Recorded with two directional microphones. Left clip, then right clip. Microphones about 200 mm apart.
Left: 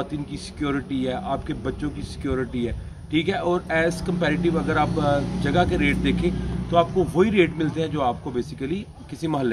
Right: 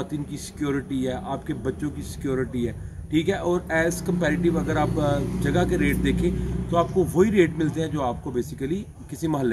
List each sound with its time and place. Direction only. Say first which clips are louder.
0.0 s a man's voice: left 1 dB; centre (ahead or behind)